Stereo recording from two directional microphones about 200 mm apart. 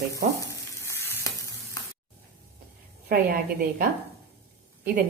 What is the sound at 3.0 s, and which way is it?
Speech, 45° right (ahead or behind).